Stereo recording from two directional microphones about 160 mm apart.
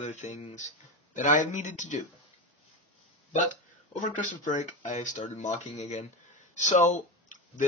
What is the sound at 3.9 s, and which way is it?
Speech, 50° left (ahead or behind).